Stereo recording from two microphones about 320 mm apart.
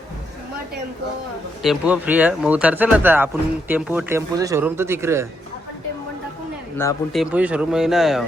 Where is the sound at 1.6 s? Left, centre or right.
Centre.